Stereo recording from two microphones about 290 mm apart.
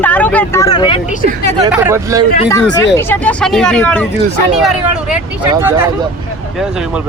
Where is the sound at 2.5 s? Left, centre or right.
Centre.